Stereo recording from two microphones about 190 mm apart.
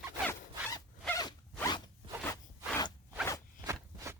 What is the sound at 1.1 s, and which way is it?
Zipper, 20° left (ahead or behind).